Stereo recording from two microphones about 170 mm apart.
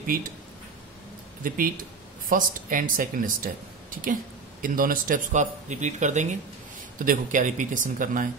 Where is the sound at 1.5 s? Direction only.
55° right (ahead or behind).